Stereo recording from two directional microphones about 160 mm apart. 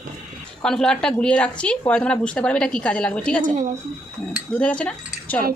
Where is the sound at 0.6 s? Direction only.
5° left (ahead or behind).